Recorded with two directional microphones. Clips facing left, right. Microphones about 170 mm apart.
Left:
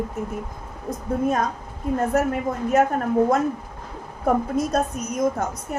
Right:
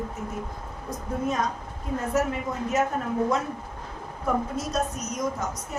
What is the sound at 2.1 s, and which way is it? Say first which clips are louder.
Speech: left 2 dB; 55° left (ahead or behind).